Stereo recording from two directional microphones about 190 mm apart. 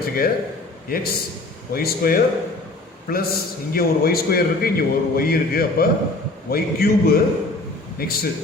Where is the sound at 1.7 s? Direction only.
50° left (ahead or behind).